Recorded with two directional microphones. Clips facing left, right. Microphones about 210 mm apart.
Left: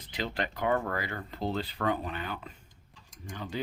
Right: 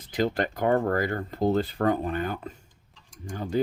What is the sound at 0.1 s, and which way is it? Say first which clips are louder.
Speech: right 8 dB; 45° right (ahead or behind).